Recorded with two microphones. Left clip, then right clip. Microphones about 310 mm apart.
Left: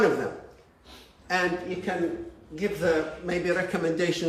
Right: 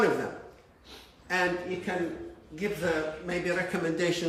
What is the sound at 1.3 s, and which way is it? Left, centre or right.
A man's voice, centre.